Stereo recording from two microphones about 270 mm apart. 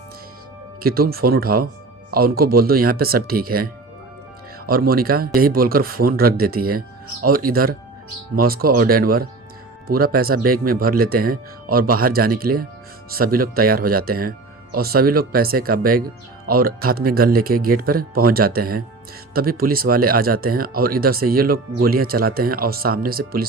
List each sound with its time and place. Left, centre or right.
0.8 s speech: right